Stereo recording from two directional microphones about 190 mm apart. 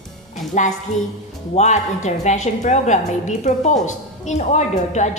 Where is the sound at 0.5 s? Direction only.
40° left (ahead or behind).